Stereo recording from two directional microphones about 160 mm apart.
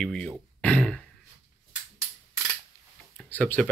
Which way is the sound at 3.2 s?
10° left (ahead or behind).